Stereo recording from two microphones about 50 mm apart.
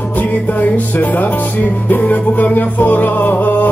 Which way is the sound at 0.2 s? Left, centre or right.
Left.